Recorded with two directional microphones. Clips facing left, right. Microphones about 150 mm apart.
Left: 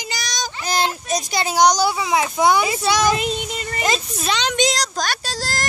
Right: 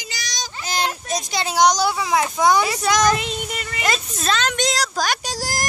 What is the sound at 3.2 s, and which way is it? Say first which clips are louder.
Child singing: left 3 dB; 35° left (ahead or behind).